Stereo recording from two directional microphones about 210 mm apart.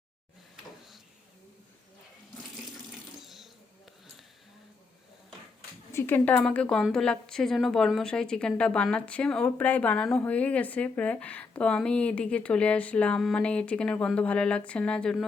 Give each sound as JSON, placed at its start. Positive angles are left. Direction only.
{"t": 3.2, "sound": "sewing machine", "side_deg": 0}
{"t": 5.9, "sound": "a woman's voice", "side_deg": 10}